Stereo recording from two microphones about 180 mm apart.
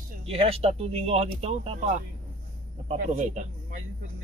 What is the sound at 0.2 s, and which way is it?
Speech, 35° right (ahead or behind).